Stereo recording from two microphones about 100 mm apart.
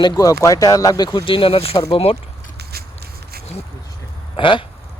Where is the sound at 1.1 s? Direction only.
55° left (ahead or behind); by 2.2 s 70° left (ahead or behind).